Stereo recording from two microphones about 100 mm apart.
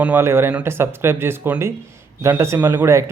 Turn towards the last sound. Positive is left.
turn(degrees=-30)  # may be behind; listen again after turning